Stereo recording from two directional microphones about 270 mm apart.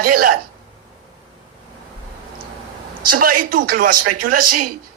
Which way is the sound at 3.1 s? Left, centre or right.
Right.